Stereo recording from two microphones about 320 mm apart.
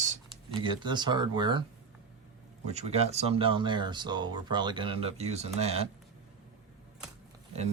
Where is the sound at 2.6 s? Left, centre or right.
Centre.